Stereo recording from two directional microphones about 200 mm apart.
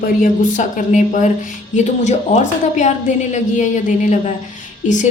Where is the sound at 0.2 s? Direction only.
40° left (ahead or behind).